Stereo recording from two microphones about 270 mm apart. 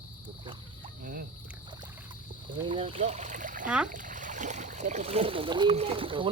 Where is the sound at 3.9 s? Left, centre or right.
Right.